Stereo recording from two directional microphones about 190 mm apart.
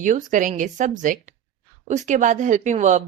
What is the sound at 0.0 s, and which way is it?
Speech, 40° right (ahead or behind).